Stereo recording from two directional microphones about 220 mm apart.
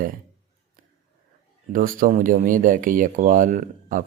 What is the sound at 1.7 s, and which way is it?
Speech, 40° right (ahead or behind).